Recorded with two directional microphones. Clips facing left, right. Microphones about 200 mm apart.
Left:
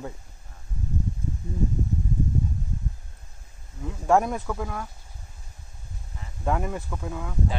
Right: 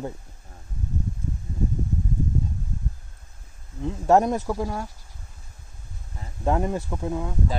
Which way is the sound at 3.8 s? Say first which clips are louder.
Right 3 dB; 25° right (ahead or behind).